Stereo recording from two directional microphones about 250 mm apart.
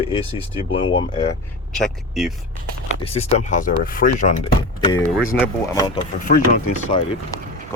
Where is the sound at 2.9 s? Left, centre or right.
Left.